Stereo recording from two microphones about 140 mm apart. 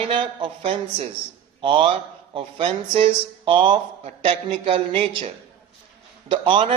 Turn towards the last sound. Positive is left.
turn(degrees=-35)  # may be behind; listen again after turning